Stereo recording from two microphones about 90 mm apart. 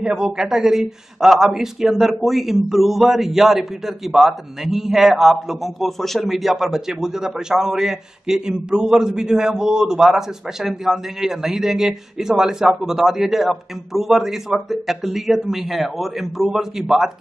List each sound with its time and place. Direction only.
0.0 s speech: 10° right (ahead or behind)